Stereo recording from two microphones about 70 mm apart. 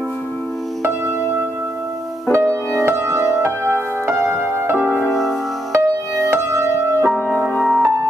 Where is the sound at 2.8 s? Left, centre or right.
Right.